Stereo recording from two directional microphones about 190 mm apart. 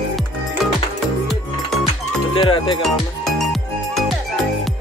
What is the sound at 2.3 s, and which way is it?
Music, 25° left (ahead or behind).